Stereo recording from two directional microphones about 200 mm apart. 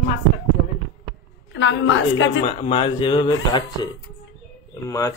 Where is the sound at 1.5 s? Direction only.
65° left (ahead or behind).